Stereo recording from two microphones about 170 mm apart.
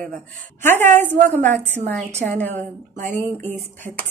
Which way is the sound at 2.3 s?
10° left (ahead or behind).